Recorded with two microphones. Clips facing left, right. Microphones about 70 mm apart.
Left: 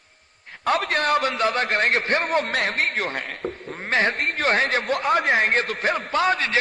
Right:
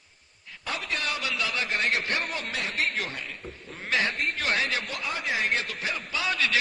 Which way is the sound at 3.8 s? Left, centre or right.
Left.